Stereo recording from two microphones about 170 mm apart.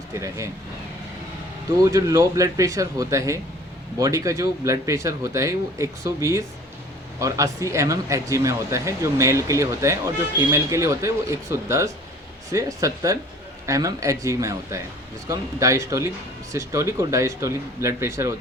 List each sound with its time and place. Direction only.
0.1 s speech: 15° right (ahead or behind)
1.8 s speech: 20° right (ahead or behind)